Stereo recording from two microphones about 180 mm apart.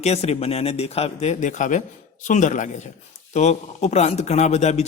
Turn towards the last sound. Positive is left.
turn(degrees=40)  # may be behind; listen again after turning